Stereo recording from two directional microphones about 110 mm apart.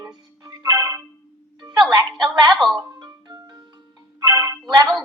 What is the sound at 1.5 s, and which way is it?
Music, 40° right (ahead or behind).